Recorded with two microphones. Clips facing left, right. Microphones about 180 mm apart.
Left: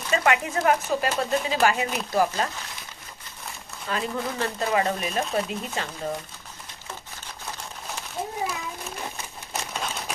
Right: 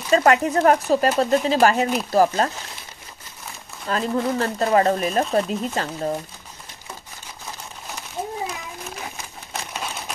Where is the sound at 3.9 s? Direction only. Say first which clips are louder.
Right 6 dB; 40° right (ahead or behind).